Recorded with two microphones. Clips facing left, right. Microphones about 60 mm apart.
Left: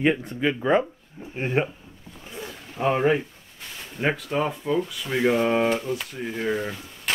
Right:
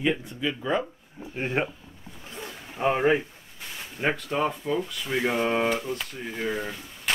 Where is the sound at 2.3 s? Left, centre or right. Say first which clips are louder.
Left 3 dB; centre.